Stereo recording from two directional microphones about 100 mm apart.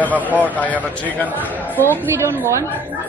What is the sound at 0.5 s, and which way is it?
A man's voice, 15° left (ahead or behind).